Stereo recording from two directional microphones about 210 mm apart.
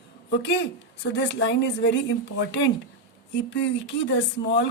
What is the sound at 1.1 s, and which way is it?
Speech, 55° left (ahead or behind).